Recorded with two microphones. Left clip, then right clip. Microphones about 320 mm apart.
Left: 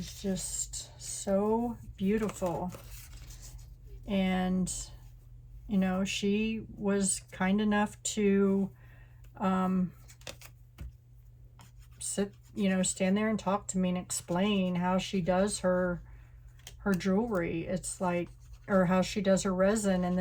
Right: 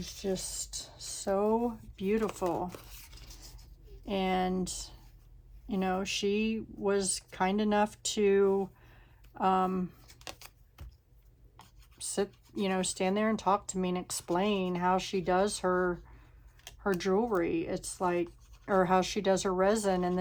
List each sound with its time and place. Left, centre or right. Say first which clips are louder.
0.2 s speech: right 2 dB; right
9.4 s a sound: right 4 dB; centre
12.1 s speech: right 2 dB; centre